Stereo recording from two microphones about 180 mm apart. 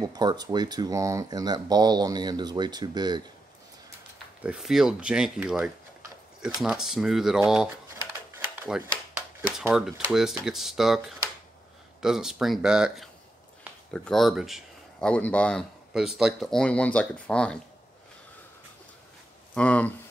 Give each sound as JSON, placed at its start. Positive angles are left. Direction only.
{"t": 0.0, "sound": "speech", "side_deg": -20}
{"t": 4.4, "sound": "speech", "side_deg": -5}
{"t": 8.4, "sound": "mechanisms", "side_deg": -10}
{"t": 9.6, "sound": "speech", "side_deg": 0}
{"t": 19.5, "sound": "speech", "side_deg": 5}